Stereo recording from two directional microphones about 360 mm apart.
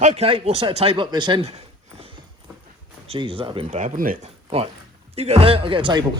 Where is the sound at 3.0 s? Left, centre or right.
Centre.